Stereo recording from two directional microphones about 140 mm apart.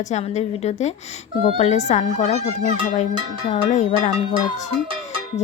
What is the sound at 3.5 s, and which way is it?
Speech, 55° left (ahead or behind).